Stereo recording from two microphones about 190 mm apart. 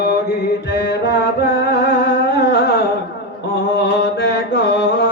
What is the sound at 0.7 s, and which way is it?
Mantra, 60° left (ahead or behind).